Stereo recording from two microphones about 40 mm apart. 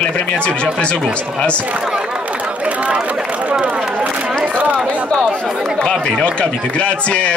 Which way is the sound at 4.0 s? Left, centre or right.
Right.